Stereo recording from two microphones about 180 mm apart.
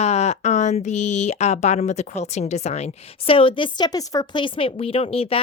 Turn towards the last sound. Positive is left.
turn(degrees=35)  # may be behind; listen again after turning